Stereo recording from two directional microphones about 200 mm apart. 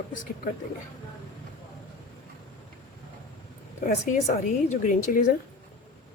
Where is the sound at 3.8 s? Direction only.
40° left (ahead or behind).